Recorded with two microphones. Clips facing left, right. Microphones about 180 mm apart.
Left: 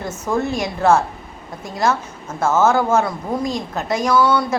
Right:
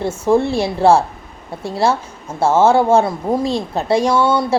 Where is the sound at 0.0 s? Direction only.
30° right (ahead or behind).